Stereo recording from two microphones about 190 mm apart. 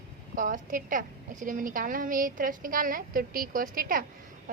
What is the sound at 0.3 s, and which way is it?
A woman's voice, 45° right (ahead or behind).